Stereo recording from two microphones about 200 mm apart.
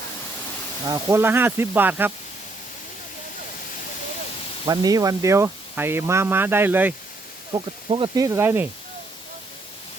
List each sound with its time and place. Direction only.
0.9 s speech: 15° right (ahead or behind)
4.6 s speech: 20° right (ahead or behind)
7.5 s speech: 25° right (ahead or behind)